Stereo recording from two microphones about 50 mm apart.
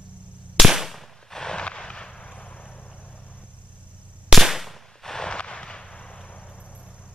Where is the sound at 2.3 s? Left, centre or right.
Left.